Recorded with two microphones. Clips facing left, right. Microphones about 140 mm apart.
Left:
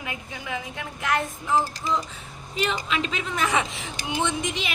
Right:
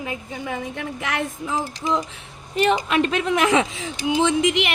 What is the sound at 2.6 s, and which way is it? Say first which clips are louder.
A woman's voice: right 8 dB; 55° right (ahead or behind).